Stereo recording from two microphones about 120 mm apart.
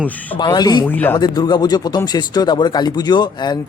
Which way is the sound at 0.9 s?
15° left (ahead or behind).